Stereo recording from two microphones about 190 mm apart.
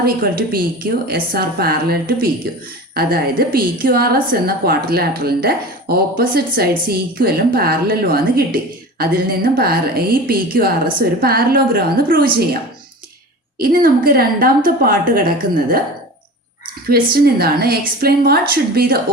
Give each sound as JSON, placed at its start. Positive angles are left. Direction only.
{"t": 0.0, "sound": "a woman's voice", "side_deg": -50}
{"t": 13.6, "sound": "a woman's voice", "side_deg": -50}
{"t": 17.2, "sound": "a woman's voice", "side_deg": -55}